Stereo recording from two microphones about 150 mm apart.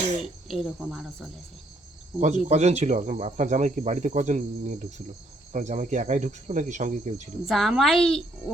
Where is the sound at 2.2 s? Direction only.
50° right (ahead or behind).